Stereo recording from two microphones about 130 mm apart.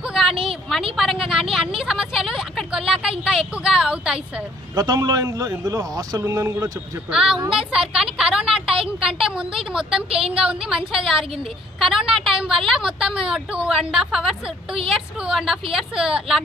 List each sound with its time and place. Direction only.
0.0 s a sound: 5° right (ahead or behind)
0.9 s a woman's voice: 5° right (ahead or behind)
4.7 s a man's voice: 30° right (ahead or behind)
7.1 s a woman's voice: 5° right (ahead or behind)
11.8 s a woman's voice: centre (ahead or behind)